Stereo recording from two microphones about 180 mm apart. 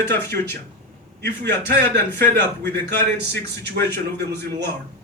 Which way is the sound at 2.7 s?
65° right (ahead or behind).